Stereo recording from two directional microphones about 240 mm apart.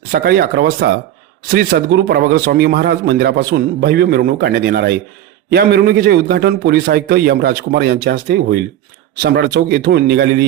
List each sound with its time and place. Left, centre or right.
0.1 s a man's voice: right